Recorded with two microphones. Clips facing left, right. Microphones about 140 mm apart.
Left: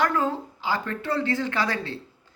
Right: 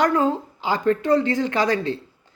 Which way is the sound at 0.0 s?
20° right (ahead or behind).